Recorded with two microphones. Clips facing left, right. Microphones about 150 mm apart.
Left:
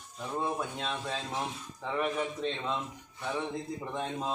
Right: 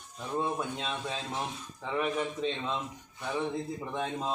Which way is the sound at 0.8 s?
5° right (ahead or behind).